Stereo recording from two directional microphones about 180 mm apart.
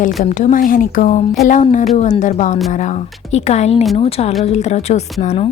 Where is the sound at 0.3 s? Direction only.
40° left (ahead or behind).